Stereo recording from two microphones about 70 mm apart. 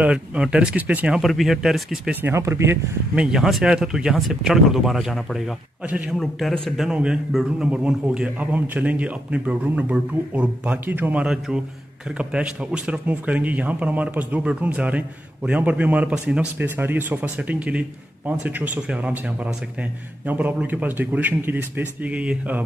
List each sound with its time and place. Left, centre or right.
0.0 s a man's voice: centre
1.2 s speech: centre
2.3 s speech: right
3.2 s speech: centre
5.9 s a man's voice: right
11.2 s a man's voice: centre; by 17.3 s right
17.4 s a man's voice: centre